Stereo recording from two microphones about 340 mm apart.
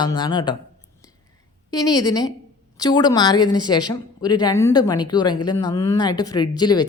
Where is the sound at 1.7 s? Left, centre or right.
Centre.